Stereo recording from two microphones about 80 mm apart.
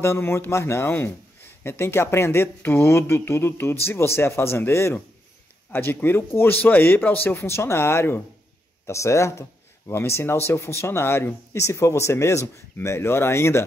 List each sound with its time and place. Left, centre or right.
0.0 s speech: left
7.3 s speech: left